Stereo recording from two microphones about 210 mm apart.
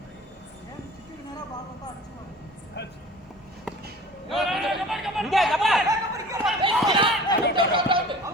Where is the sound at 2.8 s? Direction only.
55° left (ahead or behind).